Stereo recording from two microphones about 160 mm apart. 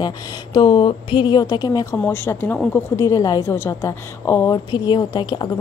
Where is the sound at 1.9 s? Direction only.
10° left (ahead or behind).